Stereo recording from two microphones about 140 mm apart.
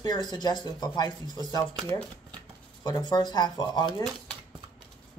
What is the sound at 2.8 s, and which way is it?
Speech, 30° left (ahead or behind).